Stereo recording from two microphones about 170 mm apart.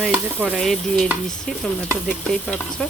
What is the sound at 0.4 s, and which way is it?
Speech, centre (ahead or behind).